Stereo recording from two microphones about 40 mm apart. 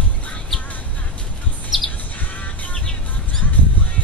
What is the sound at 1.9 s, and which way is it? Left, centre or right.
Music, left.